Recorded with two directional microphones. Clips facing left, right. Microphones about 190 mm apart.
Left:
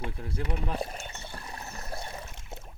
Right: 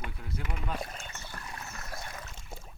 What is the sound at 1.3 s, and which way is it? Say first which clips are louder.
Boat: left 2 dB; 30° left (ahead or behind).